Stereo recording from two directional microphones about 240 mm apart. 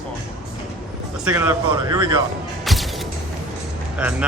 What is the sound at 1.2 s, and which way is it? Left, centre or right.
Speech, centre.